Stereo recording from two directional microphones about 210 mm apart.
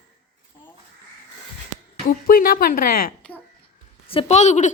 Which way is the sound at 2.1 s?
45° left (ahead or behind).